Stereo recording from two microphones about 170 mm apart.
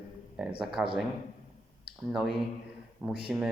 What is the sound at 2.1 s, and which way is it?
Speech, centre (ahead or behind).